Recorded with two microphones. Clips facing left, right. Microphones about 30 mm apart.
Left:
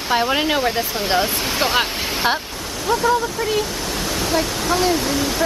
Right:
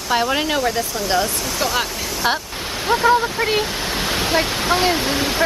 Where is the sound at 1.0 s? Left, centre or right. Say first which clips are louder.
Left 1 dB; left.